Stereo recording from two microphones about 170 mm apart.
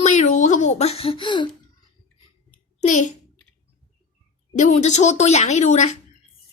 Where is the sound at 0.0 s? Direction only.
45° left (ahead or behind).